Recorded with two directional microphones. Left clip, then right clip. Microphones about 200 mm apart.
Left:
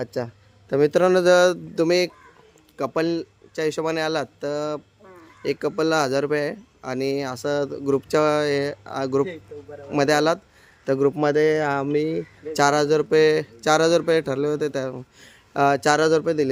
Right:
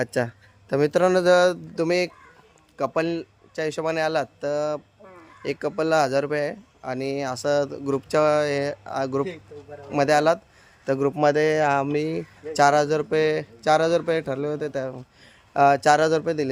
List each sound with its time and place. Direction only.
0.7 s a man's voice: centre (ahead or behind)
9.5 s a man's voice: 50° right (ahead or behind)
9.9 s a man's voice: 10° left (ahead or behind)
12.5 s a man's voice: 10° left (ahead or behind)